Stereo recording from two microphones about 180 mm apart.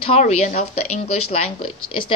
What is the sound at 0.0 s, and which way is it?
A woman's voice, 35° left (ahead or behind).